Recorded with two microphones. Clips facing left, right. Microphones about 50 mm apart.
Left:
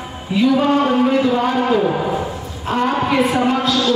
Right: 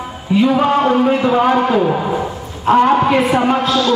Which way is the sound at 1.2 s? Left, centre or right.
Right.